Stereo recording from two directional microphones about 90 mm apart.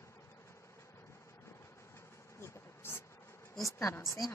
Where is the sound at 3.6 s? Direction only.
35° left (ahead or behind).